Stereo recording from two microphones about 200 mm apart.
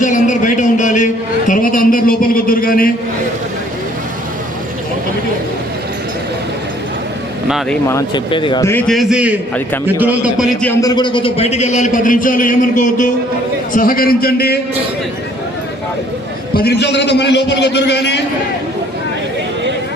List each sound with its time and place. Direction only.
0.0 s a sound: 40° left (ahead or behind)
7.4 s speech: centre (ahead or behind)
7.9 s speech: 20° left (ahead or behind)
8.9 s a man's voice: centre (ahead or behind)
10.6 s a man's voice: 15° left (ahead or behind); by 14.6 s 50° left (ahead or behind)
16.6 s a man's voice: 55° left (ahead or behind)